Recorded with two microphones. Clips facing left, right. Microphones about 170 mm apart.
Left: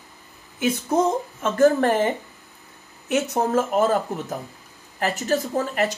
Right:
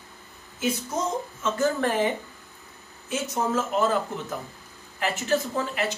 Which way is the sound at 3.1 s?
55° left (ahead or behind).